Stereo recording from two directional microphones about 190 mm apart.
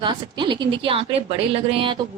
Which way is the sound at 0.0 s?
25° right (ahead or behind).